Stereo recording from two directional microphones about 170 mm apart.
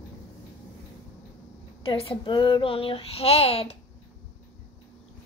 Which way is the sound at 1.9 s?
30° left (ahead or behind).